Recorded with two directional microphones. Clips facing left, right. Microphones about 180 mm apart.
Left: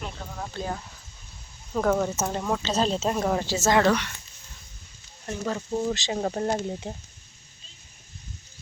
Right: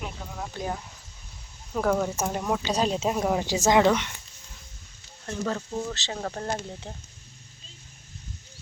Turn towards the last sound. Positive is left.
turn(degrees=15)  # may be behind; listen again after turning